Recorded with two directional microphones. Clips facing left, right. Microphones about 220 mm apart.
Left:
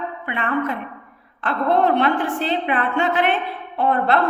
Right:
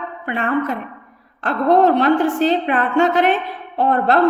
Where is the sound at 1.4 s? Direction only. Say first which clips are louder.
Right 4 dB; 40° right (ahead or behind).